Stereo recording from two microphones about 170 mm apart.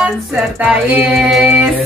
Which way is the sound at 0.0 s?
5° right (ahead or behind).